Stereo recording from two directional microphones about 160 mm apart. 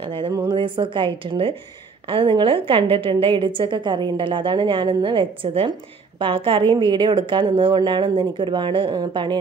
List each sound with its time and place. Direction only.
0.2 s a woman's voice: 30° right (ahead or behind)